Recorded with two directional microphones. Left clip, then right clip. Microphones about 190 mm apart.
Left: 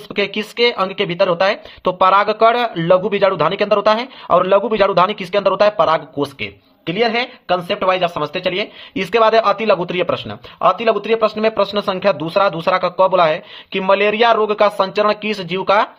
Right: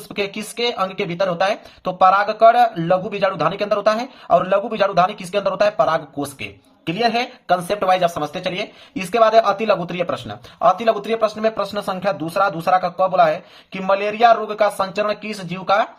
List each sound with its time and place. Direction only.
0.1 s speech: 35° left (ahead or behind)